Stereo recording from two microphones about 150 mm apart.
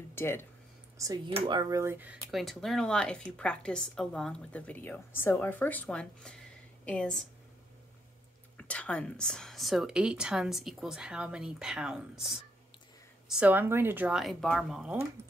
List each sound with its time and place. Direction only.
0.1 s speech: 15° left (ahead or behind)
0.9 s speech: 25° right (ahead or behind)
2.3 s a woman's voice: centre (ahead or behind)
8.5 s a woman's voice: 10° left (ahead or behind)